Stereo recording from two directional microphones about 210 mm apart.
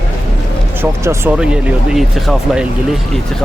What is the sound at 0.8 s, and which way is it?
Speech, 10° right (ahead or behind).